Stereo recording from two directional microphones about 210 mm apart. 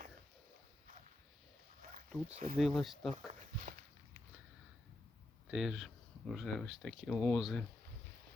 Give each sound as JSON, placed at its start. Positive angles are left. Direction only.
{"t": 1.8, "sound": "a sound", "side_deg": -40}
{"t": 2.6, "sound": "speech", "side_deg": 0}
{"t": 3.7, "sound": "walk", "side_deg": -40}
{"t": 5.5, "sound": "speech", "side_deg": 0}